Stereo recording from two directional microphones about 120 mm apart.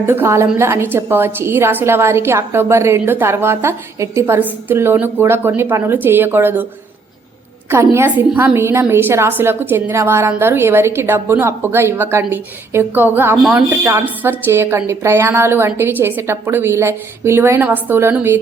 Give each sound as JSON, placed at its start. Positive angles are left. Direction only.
{"t": 0.0, "sound": "a woman's voice", "side_deg": -20}
{"t": 7.7, "sound": "a woman's voice", "side_deg": -20}
{"t": 13.3, "sound": "speech", "side_deg": -5}
{"t": 13.7, "sound": "a woman's voice", "side_deg": -15}